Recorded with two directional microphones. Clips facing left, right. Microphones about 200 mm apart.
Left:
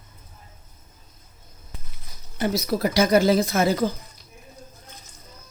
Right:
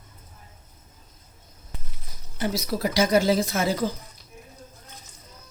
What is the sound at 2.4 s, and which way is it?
Speech, 55° left (ahead or behind).